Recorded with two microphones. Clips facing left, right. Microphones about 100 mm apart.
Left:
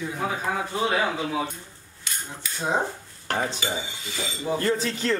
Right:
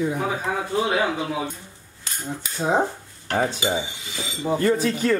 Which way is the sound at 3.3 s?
20° right (ahead or behind).